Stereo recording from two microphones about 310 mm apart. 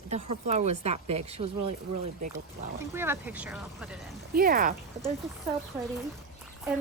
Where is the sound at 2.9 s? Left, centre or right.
Centre.